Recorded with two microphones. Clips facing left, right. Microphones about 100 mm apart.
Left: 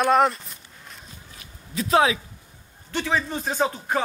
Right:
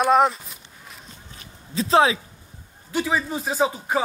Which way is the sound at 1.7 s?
30° right (ahead or behind).